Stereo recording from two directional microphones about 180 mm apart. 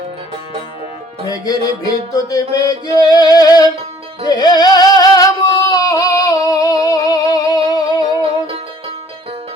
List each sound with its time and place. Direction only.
1.3 s music: 20° left (ahead or behind)
4.3 s singing: 25° left (ahead or behind)
8.1 s music: 30° right (ahead or behind)